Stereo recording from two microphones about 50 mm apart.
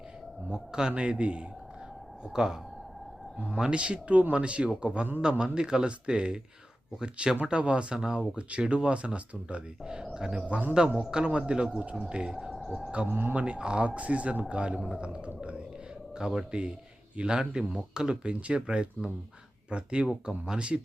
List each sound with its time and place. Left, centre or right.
0.5 s speech: centre
2.2 s speech: centre
10.4 s speech: right
10.8 s speech: centre
12.5 s cricket: centre
13.1 s speech: right
13.3 s speech: right
16.1 s speech: centre